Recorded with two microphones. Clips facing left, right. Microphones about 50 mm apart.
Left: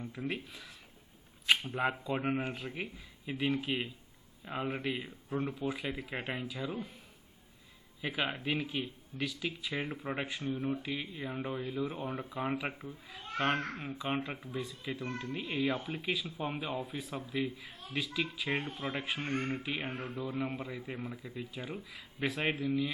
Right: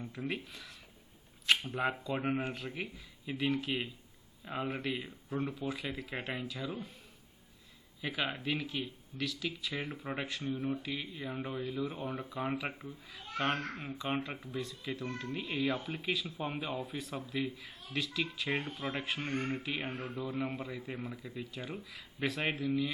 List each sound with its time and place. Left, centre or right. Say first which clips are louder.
0.0 s speech: even; centre
8.0 s speech: left 1 dB; centre
9.9 s speech: left 1 dB; centre
10.5 s speech: left 1 dB; centre
10.8 s speech: left 1 dB; centre
19.3 s speech: left 1 dB; left
20.2 s speech: even; centre